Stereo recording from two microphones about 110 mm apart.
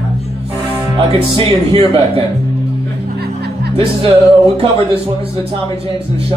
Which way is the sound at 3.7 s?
60° right (ahead or behind).